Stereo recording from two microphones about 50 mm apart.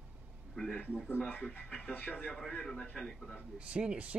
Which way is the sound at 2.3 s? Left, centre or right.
Centre.